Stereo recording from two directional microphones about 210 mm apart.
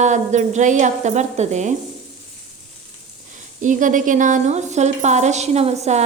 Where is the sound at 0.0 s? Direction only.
35° right (ahead or behind).